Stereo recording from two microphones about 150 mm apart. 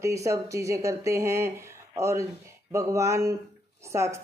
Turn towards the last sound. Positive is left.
turn(degrees=-20)  # may be behind; listen again after turning